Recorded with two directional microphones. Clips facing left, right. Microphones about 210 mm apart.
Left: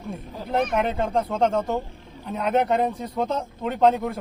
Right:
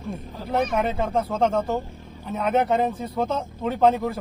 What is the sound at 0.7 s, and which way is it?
A man's voice, centre (ahead or behind).